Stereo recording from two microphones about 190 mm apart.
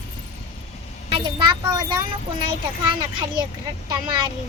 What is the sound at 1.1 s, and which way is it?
Speech, 25° right (ahead or behind).